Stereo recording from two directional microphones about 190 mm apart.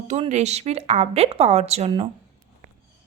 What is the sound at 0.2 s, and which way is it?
Speech, 35° right (ahead or behind).